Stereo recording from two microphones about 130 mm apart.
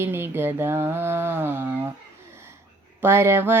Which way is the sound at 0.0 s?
15° right (ahead or behind).